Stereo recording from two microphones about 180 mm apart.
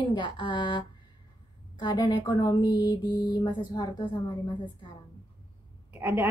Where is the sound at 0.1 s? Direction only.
25° left (ahead or behind).